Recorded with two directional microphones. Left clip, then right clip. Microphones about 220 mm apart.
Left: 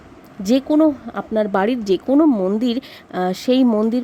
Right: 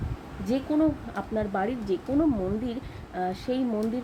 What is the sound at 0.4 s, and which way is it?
Speech, 50° left (ahead or behind).